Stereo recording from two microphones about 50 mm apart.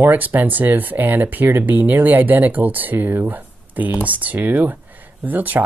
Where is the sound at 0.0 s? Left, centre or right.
Right.